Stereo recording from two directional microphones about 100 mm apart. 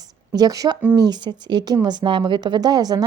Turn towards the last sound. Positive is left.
turn(degrees=-40)  # may be behind; listen again after turning